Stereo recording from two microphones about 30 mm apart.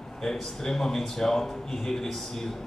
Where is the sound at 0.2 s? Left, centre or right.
Centre.